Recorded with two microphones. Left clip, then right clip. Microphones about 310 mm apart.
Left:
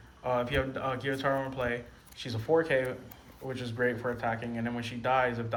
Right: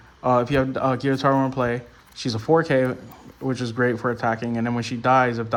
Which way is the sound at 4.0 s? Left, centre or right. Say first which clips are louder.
Right 9 dB; centre.